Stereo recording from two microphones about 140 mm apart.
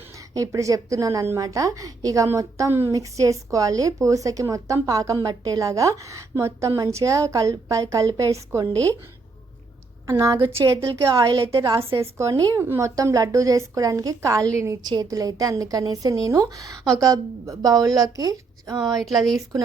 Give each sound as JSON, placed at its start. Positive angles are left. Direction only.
{"t": 0.3, "sound": "a woman's voice", "side_deg": -25}
{"t": 10.1, "sound": "a woman's voice", "side_deg": -20}
{"t": 11.5, "sound": "a woman's voice", "side_deg": -35}
{"t": 11.9, "sound": "a woman's voice", "side_deg": -20}